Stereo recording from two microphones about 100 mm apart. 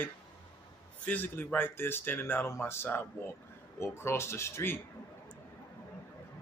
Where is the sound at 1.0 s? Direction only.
20° left (ahead or behind).